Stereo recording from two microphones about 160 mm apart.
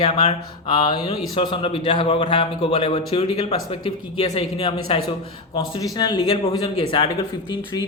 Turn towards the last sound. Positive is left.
turn(degrees=30)  # may be behind; listen again after turning